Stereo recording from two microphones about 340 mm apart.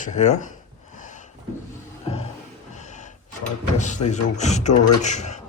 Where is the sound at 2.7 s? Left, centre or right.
Left.